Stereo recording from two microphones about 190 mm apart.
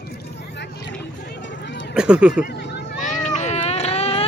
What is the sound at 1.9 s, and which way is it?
Speech, 5° right (ahead or behind).